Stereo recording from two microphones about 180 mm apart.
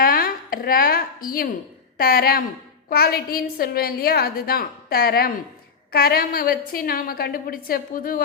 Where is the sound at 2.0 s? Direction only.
55° left (ahead or behind).